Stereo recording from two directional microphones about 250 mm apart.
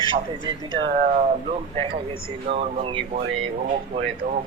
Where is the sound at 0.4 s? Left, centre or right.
Centre.